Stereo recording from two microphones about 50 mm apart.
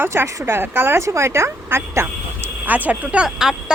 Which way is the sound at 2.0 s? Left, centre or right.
Right.